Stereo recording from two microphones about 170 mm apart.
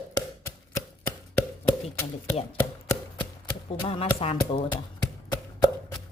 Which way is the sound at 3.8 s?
35° left (ahead or behind).